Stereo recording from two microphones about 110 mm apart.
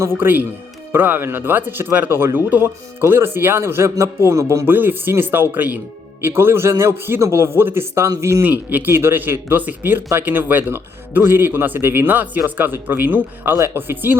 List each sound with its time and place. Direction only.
0.2 s speech: 20° right (ahead or behind)